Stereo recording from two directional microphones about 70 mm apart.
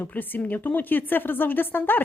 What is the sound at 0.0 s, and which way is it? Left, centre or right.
Speech, left.